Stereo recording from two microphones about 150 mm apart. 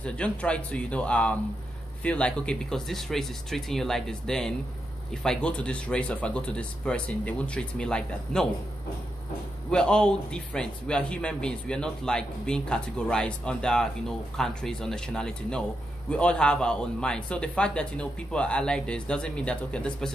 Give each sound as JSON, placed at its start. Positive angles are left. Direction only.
{"t": 0.0, "sound": "speech", "side_deg": 5}
{"t": 9.7, "sound": "speech", "side_deg": 5}